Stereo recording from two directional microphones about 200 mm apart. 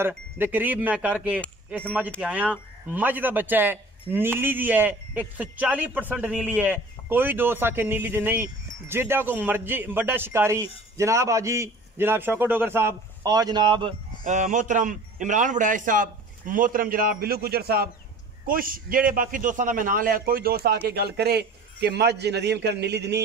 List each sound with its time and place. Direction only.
0.4 s a man's voice: 10° right (ahead or behind)
14.2 s a man's voice: 40° right (ahead or behind); by 23.2 s 55° right (ahead or behind)